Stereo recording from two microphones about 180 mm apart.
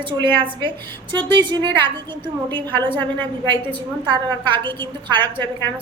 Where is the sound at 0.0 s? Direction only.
25° right (ahead or behind).